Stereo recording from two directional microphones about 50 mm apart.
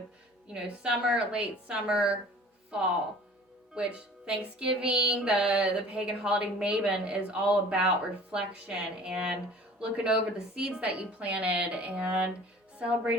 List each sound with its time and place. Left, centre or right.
0.4 s speech: centre
3.8 s speech: right